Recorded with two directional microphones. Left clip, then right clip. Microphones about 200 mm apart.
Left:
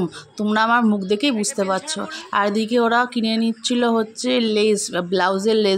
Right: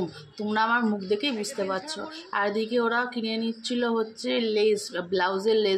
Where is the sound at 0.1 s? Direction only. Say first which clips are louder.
Left 7 dB; 55° left (ahead or behind).